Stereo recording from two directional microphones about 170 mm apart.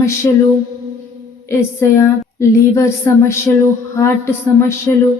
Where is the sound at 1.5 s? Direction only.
15° left (ahead or behind).